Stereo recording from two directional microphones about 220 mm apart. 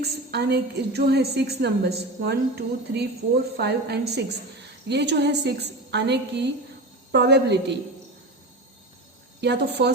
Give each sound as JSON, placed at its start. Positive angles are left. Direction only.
{"t": 0.0, "sound": "a woman's voice", "side_deg": -50}
{"t": 9.4, "sound": "a woman's voice", "side_deg": -50}